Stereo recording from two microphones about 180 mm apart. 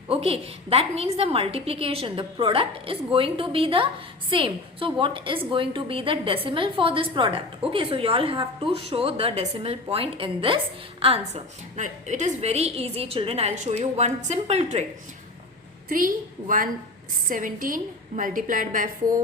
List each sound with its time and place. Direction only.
0.1 s a woman's voice: 30° right (ahead or behind)
15.9 s a woman's voice: 50° right (ahead or behind)